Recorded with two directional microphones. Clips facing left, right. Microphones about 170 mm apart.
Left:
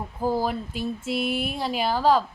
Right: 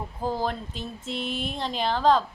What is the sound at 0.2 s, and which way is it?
A woman's voice, 10° left (ahead or behind).